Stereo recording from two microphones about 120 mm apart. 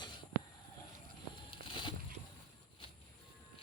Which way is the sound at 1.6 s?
45° left (ahead or behind).